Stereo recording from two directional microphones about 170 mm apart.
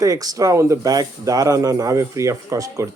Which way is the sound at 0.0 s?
20° right (ahead or behind).